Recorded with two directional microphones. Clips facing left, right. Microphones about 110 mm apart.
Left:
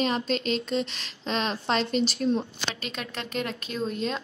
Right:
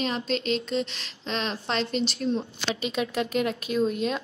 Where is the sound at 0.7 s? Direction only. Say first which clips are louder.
Even; centre (ahead or behind).